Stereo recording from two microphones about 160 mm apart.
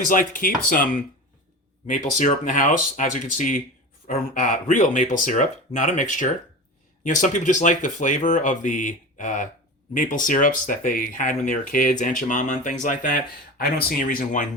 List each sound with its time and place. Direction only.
0.0 s speech: 55° left (ahead or behind)
1.9 s speech: 50° left (ahead or behind)